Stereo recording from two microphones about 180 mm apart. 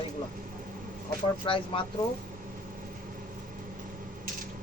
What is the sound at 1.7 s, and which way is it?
Speech, 30° left (ahead or behind).